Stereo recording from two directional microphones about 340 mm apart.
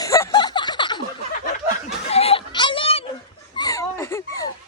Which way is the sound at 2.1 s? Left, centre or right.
Centre.